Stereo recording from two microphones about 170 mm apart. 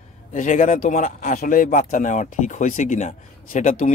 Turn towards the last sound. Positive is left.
turn(degrees=50)  # may be behind; listen again after turning